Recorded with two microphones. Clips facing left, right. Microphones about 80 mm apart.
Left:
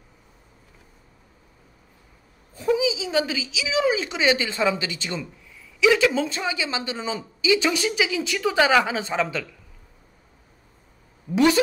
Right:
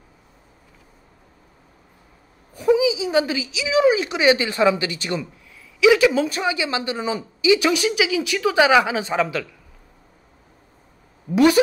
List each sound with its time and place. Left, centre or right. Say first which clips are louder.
2.5 s a sound: right 5 dB; centre
3.0 s a woman's voice: right 4 dB; right
11.3 s speech: right 4 dB; centre